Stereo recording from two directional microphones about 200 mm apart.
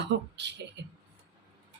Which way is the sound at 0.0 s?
60° right (ahead or behind).